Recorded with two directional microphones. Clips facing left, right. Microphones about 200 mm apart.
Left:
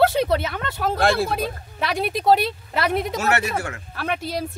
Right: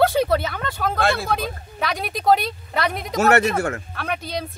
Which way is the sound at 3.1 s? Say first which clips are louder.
Right 5 dB; 50° right (ahead or behind).